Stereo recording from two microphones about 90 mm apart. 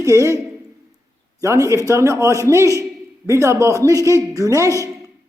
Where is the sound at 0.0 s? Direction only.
35° right (ahead or behind).